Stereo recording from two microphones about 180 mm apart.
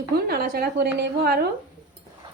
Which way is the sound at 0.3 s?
55° right (ahead or behind).